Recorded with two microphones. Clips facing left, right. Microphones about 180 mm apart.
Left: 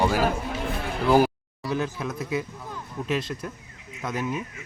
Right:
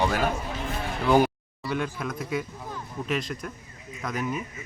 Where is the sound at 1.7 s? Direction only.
25° left (ahead or behind).